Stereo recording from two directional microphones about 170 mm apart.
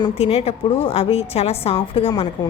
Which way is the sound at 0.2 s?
40° left (ahead or behind).